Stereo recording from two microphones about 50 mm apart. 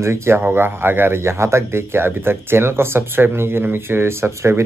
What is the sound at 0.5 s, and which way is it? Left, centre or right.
Speech, right.